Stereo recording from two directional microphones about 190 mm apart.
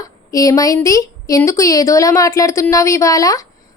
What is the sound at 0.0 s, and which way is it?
A woman's voice, 20° left (ahead or behind).